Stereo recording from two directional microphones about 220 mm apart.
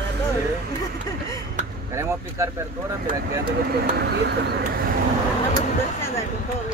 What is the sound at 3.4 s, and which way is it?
Speech, 45° right (ahead or behind).